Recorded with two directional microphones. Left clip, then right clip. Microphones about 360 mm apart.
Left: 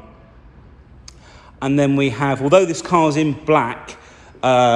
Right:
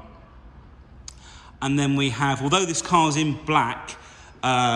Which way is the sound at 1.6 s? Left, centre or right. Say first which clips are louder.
Left 6 dB; centre.